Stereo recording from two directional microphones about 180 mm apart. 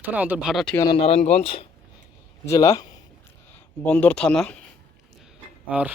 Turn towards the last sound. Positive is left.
turn(degrees=-10)  # may be behind; listen again after turning